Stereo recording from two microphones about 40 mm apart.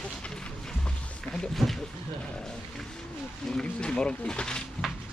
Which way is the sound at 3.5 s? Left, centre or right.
Left.